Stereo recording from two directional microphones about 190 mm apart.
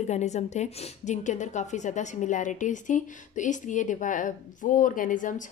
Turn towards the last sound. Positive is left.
turn(degrees=45)  # may be behind; listen again after turning